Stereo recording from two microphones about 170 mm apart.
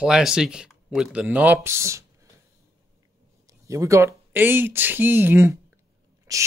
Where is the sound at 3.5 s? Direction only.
20° right (ahead or behind).